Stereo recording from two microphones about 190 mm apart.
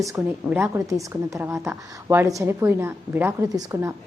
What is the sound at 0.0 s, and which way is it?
A woman's voice, 15° right (ahead or behind).